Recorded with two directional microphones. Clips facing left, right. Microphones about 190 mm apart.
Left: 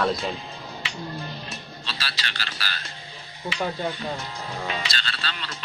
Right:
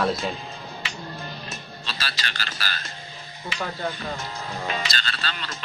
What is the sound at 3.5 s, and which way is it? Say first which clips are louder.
Speech: left 2 dB; 45° right (ahead or behind).